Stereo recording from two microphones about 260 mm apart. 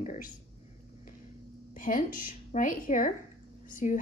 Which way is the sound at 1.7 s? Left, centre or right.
Left.